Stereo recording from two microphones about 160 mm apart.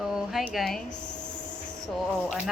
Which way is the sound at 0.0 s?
5° right (ahead or behind).